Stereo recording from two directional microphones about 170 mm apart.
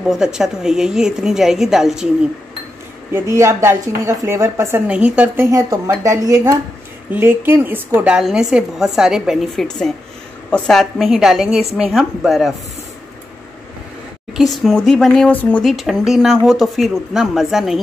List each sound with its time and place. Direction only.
0.1 s a woman's voice: 5° right (ahead or behind)
3.1 s a woman's voice: 15° right (ahead or behind)
14.3 s a woman's voice: centre (ahead or behind)